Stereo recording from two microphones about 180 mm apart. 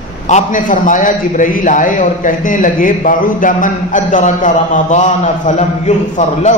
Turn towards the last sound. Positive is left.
turn(degrees=40)  # may be behind; listen again after turning